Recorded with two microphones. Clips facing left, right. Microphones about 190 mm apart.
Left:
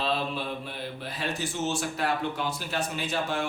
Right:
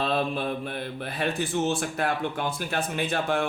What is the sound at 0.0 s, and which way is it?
Speech, 55° right (ahead or behind).